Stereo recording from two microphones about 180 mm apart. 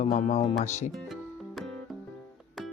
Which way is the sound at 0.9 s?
Centre (ahead or behind).